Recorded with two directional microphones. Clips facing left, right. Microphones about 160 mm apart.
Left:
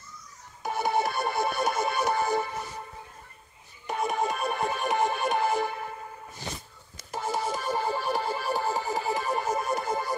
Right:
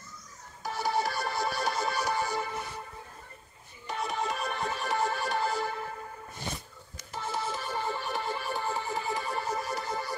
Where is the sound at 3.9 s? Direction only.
50° left (ahead or behind).